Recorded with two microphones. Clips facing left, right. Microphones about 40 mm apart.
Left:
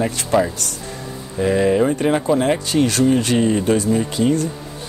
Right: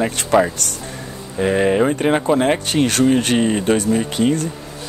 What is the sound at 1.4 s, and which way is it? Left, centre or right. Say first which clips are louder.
Speech: even; right.